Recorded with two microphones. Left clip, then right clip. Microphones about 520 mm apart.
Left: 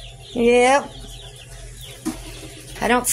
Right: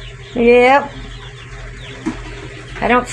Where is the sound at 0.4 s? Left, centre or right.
Left.